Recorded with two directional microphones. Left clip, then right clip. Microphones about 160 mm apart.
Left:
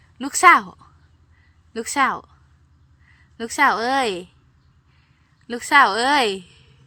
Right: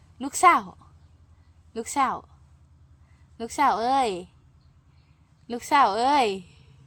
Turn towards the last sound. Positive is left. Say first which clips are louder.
# left 3 dB
turn(degrees=5)  # may be behind; listen again after turning